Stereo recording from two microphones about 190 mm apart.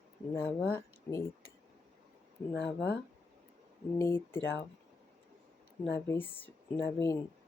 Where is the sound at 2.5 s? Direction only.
60° left (ahead or behind).